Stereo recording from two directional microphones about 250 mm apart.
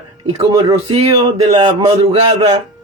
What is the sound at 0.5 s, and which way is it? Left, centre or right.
Speech, right.